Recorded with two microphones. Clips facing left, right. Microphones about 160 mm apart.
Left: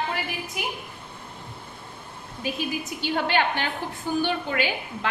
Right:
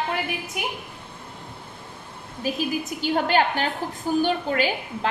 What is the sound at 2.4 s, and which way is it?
A woman's voice, 40° right (ahead or behind).